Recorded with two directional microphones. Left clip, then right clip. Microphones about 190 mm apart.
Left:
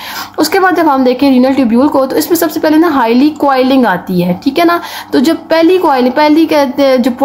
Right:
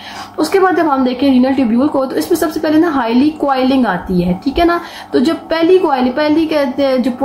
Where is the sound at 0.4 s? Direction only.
45° left (ahead or behind).